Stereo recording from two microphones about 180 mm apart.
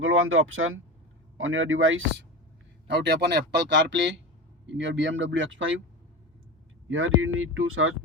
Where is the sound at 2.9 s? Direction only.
70° right (ahead or behind).